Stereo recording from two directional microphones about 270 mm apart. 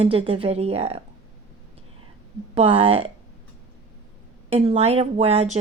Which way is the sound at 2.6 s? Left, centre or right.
Right.